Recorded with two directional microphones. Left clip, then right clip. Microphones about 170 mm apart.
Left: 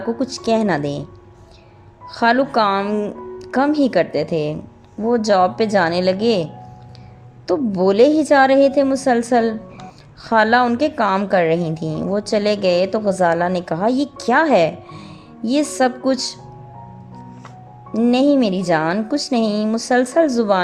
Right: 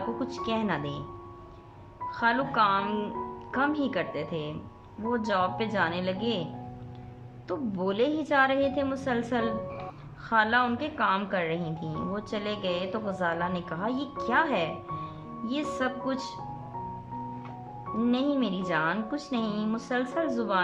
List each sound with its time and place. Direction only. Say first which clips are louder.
0.2 s speech: left 12 dB; 35° left (ahead or behind)
2.0 s speech: left 11 dB; 35° left (ahead or behind)
2.7 s speech: left 8 dB; 25° left (ahead or behind)
7.4 s speech: left 14 dB; 35° left (ahead or behind)
17.9 s speech: left 13 dB; 40° left (ahead or behind)